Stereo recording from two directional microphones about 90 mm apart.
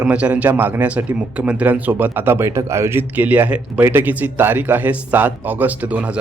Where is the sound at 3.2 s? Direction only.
20° right (ahead or behind).